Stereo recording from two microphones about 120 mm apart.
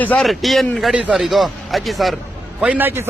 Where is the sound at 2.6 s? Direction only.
15° right (ahead or behind).